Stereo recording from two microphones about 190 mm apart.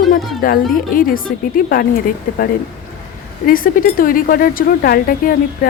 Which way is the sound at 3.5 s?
45° left (ahead or behind).